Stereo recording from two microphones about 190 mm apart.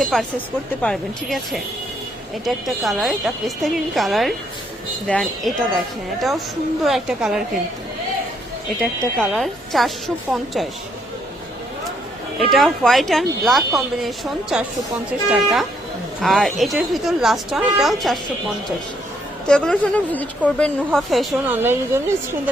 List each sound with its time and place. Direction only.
0.0 s speech: centre (ahead or behind)
6.8 s speech: 5° right (ahead or behind)
8.8 s speech: centre (ahead or behind)
12.4 s speech: centre (ahead or behind)
19.5 s speech: 5° left (ahead or behind)
21.6 s speech: 10° right (ahead or behind)